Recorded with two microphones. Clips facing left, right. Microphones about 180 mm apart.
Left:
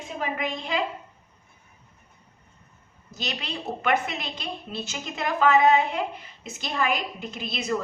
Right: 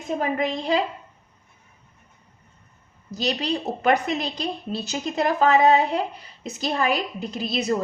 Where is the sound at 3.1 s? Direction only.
40° right (ahead or behind).